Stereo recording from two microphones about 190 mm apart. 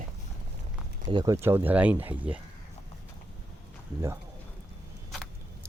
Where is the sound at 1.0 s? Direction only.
20° right (ahead or behind).